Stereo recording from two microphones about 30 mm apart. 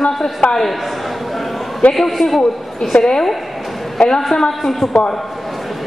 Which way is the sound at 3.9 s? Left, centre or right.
Centre.